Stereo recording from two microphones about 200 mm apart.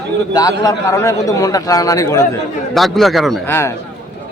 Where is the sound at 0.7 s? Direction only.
15° left (ahead or behind).